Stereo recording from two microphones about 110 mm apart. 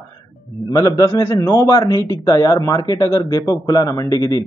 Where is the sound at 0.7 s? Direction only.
35° left (ahead or behind).